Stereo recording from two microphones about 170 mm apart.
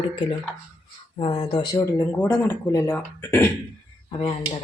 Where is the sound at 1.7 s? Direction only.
10° left (ahead or behind).